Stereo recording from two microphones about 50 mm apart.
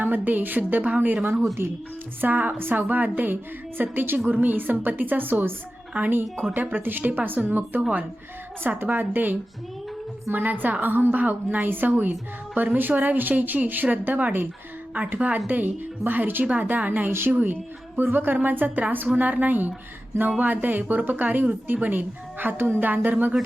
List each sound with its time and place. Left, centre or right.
0.0 s a woman's voice: right
17.1 s a woman's voice: right
17.3 s speech: right